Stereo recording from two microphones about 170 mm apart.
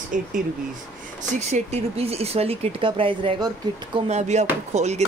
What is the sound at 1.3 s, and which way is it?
Speech, 40° right (ahead or behind).